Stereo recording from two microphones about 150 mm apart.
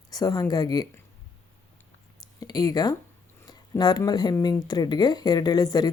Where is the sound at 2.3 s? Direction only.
25° left (ahead or behind).